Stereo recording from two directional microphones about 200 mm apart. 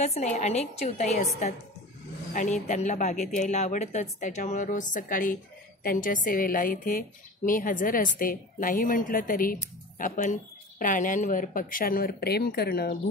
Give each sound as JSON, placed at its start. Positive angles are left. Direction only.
{"t": 0.0, "sound": "a woman's voice", "side_deg": 35}